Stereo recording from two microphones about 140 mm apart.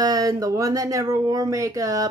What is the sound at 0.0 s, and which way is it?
Speech, 25° right (ahead or behind).